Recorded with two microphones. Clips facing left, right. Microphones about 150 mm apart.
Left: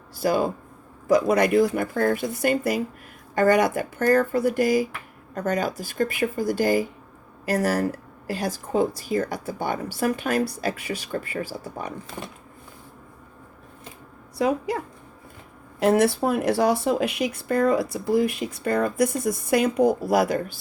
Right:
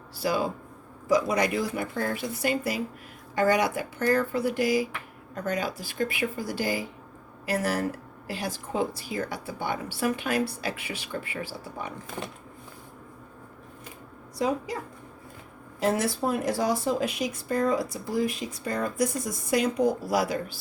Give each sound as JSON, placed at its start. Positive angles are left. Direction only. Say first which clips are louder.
{"t": 0.2, "sound": "speech", "louder": "left 5 dB", "side_deg": 50}
{"t": 14.3, "sound": "speech", "louder": "left 4 dB", "side_deg": 65}
{"t": 15.8, "sound": "speech", "louder": "left 6 dB", "side_deg": 65}